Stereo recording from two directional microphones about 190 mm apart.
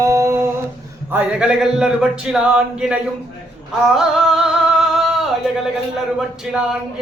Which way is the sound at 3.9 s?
Centre (ahead or behind).